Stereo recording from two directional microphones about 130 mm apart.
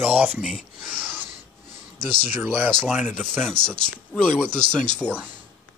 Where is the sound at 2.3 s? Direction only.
10° right (ahead or behind).